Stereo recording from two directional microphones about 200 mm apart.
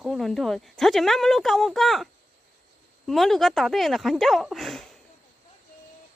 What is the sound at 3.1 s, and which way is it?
Speech, centre (ahead or behind).